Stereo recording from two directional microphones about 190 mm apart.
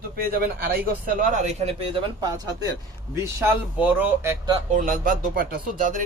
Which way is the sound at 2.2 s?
20° right (ahead or behind).